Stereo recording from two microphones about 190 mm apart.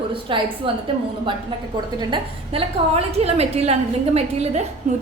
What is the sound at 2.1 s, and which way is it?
A woman's voice, 30° right (ahead or behind).